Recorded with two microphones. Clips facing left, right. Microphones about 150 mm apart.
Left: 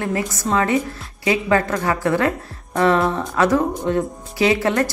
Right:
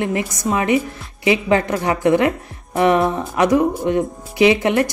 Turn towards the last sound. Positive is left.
turn(degrees=-15)  # may be behind; listen again after turning